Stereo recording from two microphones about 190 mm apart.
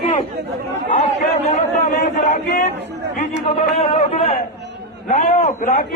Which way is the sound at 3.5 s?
30° left (ahead or behind).